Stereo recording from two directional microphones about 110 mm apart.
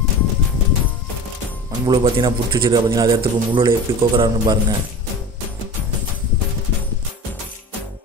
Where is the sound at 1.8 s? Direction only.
40° right (ahead or behind).